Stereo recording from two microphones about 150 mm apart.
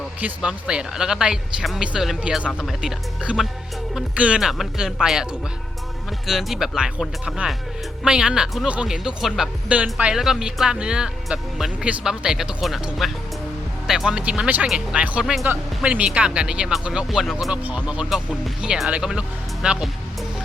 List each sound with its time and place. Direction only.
0.2 s speech: 10° right (ahead or behind)